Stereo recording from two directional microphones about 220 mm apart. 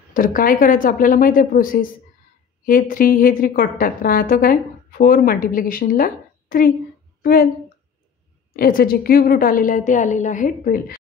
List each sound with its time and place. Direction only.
0.1 s a woman's voice: 40° left (ahead or behind)
7.2 s a sound: 40° left (ahead or behind)
8.5 s a woman's voice: 40° left (ahead or behind)